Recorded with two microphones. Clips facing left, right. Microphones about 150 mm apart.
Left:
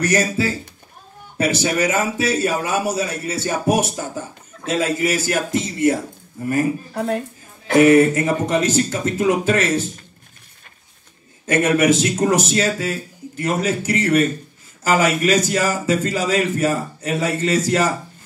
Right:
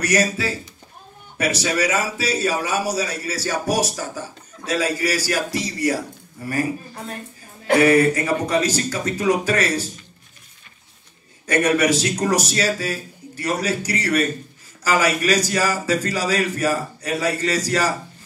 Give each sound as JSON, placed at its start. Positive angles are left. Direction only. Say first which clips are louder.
{"t": 0.0, "sound": "a man's voice", "louder": "left 2 dB", "side_deg": 30}
{"t": 6.9, "sound": "a woman's voice", "louder": "left 11 dB", "side_deg": 70}
{"t": 7.8, "sound": "a man's voice", "louder": "left 4 dB", "side_deg": 25}
{"t": 11.4, "sound": "a man's voice", "louder": "left 2 dB", "side_deg": 25}